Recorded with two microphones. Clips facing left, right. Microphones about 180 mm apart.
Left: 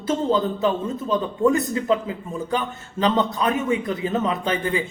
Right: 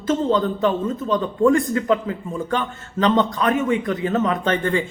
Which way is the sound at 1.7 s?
20° left (ahead or behind).